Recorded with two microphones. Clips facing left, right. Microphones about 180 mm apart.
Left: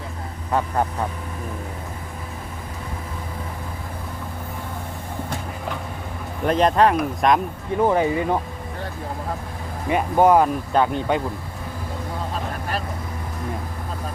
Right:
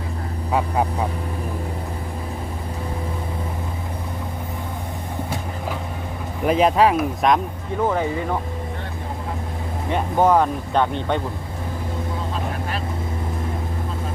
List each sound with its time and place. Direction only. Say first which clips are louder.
0.5 s speech: right 1 dB; 5° right (ahead or behind)
6.4 s speech: right 1 dB; 5° right (ahead or behind)
7.8 s speech: left 3 dB; 15° left (ahead or behind)
9.9 s speech: left 2 dB; 10° left (ahead or behind)